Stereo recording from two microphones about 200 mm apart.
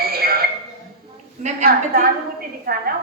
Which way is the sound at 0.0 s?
50° right (ahead or behind).